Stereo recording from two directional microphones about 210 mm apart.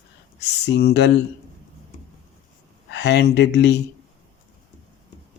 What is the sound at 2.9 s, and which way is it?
Speech, 55° left (ahead or behind).